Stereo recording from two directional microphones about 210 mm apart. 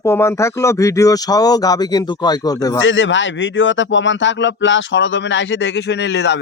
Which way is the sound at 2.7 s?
65° left (ahead or behind).